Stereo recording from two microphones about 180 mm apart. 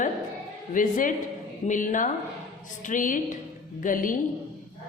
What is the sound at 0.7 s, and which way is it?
A woman's voice, 50° left (ahead or behind).